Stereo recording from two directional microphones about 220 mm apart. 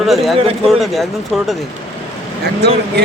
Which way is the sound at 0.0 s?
Centre (ahead or behind).